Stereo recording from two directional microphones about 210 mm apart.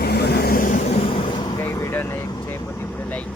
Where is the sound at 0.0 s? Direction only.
50° left (ahead or behind).